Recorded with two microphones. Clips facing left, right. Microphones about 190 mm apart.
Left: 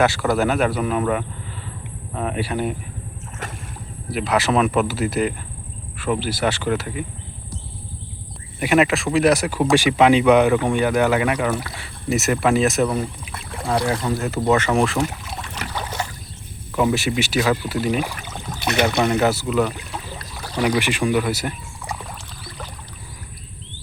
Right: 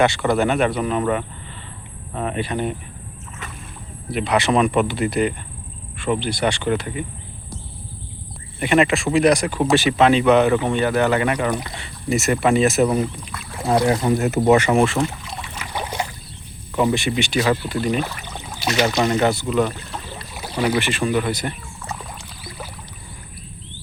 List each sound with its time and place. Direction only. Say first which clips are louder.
0.0 s speech: right 1 dB; 5° left (ahead or behind)
4.1 s speech: right 1 dB; centre (ahead or behind)
8.5 s speech: even; 5° left (ahead or behind)
13.7 s speech: right 4 dB; 20° right (ahead or behind); by 15.4 s centre (ahead or behind)
15.7 s rowboat: right 3 dB; 15° right (ahead or behind)
16.7 s speech: even; 5° left (ahead or behind)
18.7 s speech: even; 60° left (ahead or behind)
19.1 s speech: even; 5° left (ahead or behind)
20.3 s boat: even; 10° right (ahead or behind)
20.7 s speech: left 1 dB; 15° left (ahead or behind)